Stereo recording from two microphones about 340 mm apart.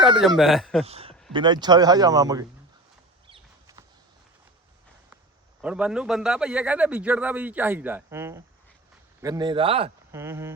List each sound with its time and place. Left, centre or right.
0.2 s a man's voice: centre
0.9 s speech: centre
3.2 s a sound: centre
5.6 s a man's voice: centre